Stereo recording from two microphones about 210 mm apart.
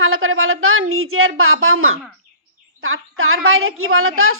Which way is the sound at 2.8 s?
75° right (ahead or behind).